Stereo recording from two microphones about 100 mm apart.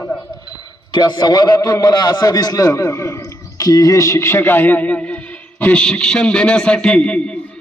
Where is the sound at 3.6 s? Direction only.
35° left (ahead or behind); by 7.3 s 10° left (ahead or behind).